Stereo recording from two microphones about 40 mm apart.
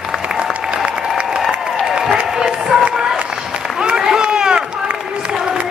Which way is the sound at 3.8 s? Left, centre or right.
Centre.